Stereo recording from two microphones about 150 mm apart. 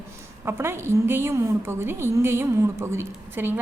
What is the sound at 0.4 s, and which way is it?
A woman's voice, 15° right (ahead or behind).